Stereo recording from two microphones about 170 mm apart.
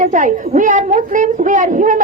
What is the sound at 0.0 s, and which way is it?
A woman's voice, 50° right (ahead or behind).